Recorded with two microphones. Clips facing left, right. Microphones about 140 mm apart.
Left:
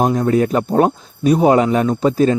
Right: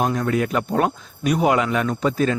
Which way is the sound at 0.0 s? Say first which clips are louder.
Left 6 dB; 30° left (ahead or behind).